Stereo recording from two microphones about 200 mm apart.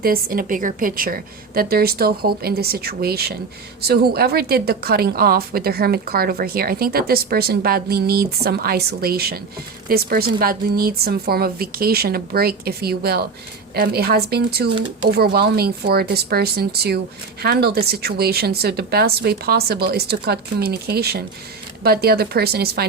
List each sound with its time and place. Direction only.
0.0 s a woman's voice: 45° right (ahead or behind)